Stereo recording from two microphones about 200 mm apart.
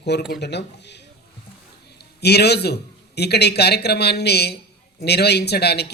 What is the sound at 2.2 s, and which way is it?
Speech, 55° left (ahead or behind).